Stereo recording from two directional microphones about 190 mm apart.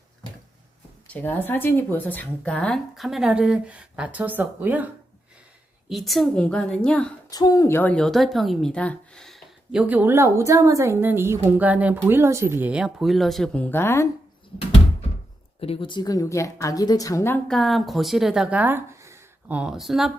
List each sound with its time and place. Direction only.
1.0 s a woman's voice: 10° left (ahead or behind); by 4.9 s 10° right (ahead or behind)
5.9 s a woman's voice: centre (ahead or behind)
7.3 s a woman's voice: 20° left (ahead or behind)
15.6 s a woman's voice: 30° left (ahead or behind)
17.5 s speech: centre (ahead or behind)